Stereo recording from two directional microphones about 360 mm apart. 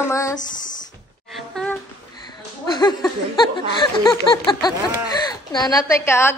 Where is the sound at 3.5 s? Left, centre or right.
Centre.